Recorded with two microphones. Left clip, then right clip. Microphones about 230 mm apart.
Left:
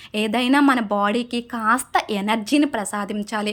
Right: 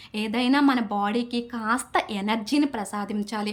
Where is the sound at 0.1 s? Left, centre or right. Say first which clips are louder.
Left 5 dB; centre.